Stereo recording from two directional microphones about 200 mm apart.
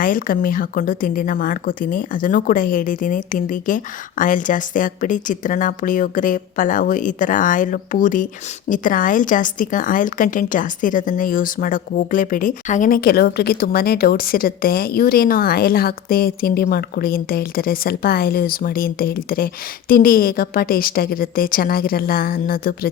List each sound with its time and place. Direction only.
0.0 s a woman's voice: 45° left (ahead or behind)